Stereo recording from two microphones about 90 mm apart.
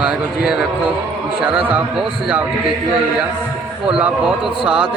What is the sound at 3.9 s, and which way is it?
Speech, 10° right (ahead or behind).